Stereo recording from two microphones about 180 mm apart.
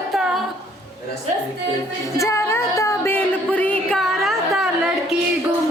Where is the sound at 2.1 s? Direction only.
15° left (ahead or behind); by 4.7 s centre (ahead or behind).